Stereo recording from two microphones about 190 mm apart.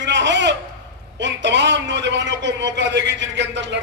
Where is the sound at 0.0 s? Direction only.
70° right (ahead or behind).